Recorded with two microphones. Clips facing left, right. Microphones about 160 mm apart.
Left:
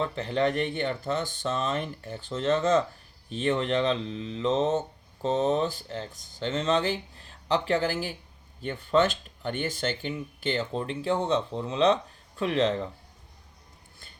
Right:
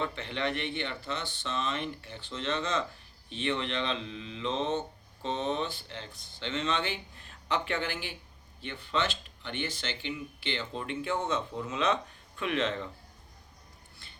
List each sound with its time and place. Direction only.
0.0 s speech: 40° left (ahead or behind)